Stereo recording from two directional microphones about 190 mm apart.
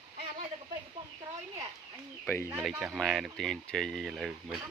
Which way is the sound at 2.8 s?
Centre (ahead or behind).